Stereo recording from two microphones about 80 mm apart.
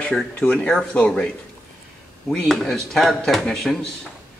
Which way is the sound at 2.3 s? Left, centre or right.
Centre.